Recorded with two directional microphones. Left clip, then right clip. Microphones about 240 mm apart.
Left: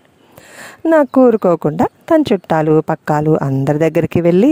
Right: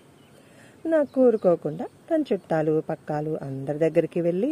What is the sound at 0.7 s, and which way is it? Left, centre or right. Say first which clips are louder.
Speech: left 11 dB; left.